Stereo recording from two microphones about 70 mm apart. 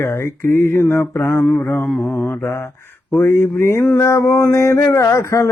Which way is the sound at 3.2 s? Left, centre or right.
Left.